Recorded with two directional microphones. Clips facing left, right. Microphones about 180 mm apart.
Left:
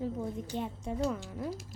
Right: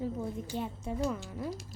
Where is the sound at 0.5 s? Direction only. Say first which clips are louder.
Even; 35° left (ahead or behind).